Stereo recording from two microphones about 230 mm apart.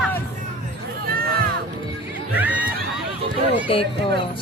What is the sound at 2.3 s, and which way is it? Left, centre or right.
Speech, centre.